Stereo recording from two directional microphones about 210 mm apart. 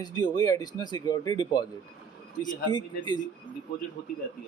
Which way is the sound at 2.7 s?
20° left (ahead or behind).